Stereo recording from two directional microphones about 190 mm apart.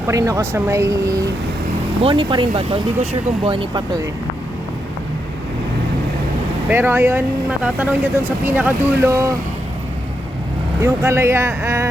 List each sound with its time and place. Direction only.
0.1 s speech: 15° right (ahead or behind)
2.0 s speech: 30° right (ahead or behind)
6.7 s speech: 10° right (ahead or behind)
10.8 s speech: 15° right (ahead or behind)